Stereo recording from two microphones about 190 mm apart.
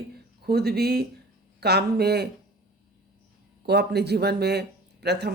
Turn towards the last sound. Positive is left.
turn(degrees=-60)  # may be behind; listen again after turning